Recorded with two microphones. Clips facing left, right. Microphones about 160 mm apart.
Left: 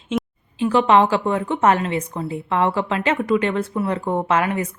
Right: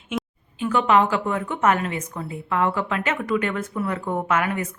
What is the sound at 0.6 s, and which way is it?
A woman's voice, 30° left (ahead or behind).